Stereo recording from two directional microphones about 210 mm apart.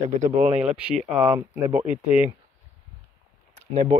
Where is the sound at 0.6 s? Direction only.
5° right (ahead or behind).